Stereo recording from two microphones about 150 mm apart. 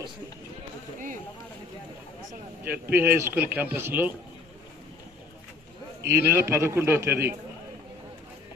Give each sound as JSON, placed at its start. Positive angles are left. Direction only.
{"t": 0.9, "sound": "a sound", "side_deg": -60}
{"t": 2.8, "sound": "speech", "side_deg": -15}
{"t": 6.1, "sound": "speech", "side_deg": -20}